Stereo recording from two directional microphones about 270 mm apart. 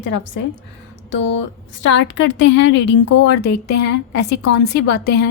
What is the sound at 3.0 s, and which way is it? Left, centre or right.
Speech, left.